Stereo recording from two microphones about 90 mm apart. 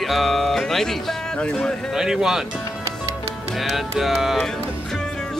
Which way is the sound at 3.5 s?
Centre (ahead or behind).